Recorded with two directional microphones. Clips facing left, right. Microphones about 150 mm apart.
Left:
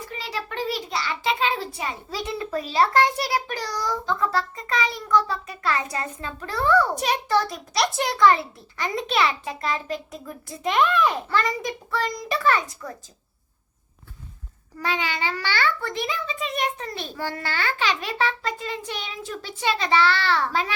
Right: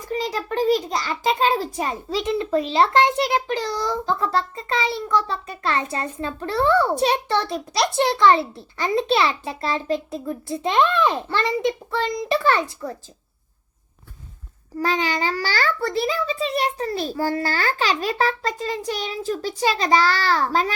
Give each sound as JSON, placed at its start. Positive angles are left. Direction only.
{"t": 0.0, "sound": "a child's voice", "side_deg": -40}
{"t": 2.0, "sound": "a child's voice", "side_deg": -20}
{"t": 14.8, "sound": "a child's voice", "side_deg": -40}